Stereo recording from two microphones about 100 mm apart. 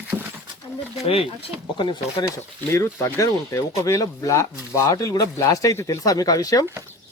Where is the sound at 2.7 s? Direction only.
30° left (ahead or behind).